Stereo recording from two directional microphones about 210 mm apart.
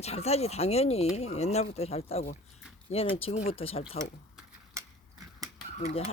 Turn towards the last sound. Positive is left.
turn(degrees=30)  # may be behind; listen again after turning